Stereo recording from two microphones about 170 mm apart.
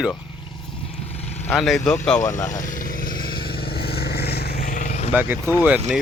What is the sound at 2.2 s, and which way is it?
Speech, 15° left (ahead or behind).